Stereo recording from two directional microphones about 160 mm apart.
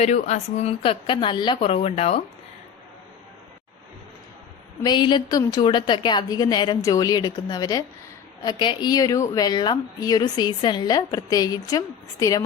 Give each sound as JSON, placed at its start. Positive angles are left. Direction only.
{"t": 0.0, "sound": "speech", "side_deg": 45}
{"t": 4.8, "sound": "speech", "side_deg": 25}